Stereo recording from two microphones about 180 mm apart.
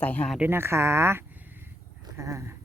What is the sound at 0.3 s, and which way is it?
Speech, 10° right (ahead or behind).